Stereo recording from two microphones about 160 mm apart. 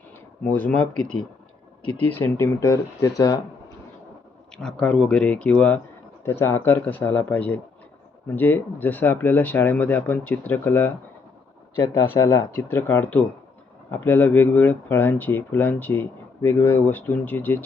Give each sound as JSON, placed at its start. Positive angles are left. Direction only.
{"t": 0.4, "sound": "speech", "side_deg": 10}
{"t": 4.5, "sound": "speech", "side_deg": 5}